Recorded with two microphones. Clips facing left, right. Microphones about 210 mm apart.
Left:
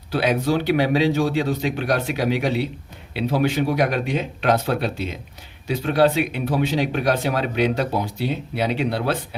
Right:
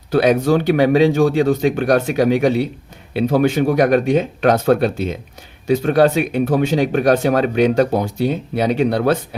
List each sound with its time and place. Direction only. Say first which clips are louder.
0.1 s speech: right 6 dB; 50° right (ahead or behind)